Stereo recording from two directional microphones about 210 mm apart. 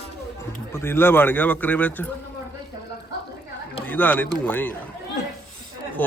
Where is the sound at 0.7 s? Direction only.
10° left (ahead or behind).